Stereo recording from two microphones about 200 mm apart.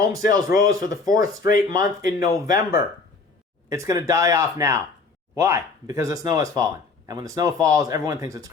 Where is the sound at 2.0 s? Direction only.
45° left (ahead or behind).